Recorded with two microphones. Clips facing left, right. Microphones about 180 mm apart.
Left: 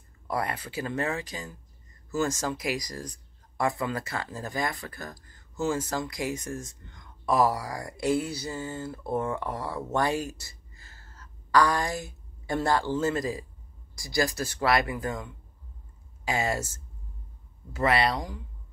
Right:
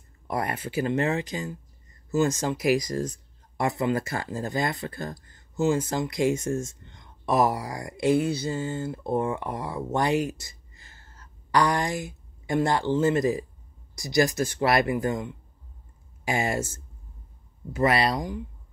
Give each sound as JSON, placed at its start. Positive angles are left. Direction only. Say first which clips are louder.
{"t": 0.3, "sound": "speech", "louder": "right 2 dB", "side_deg": -20}
{"t": 17.7, "sound": "speech", "louder": "right 2 dB", "side_deg": -20}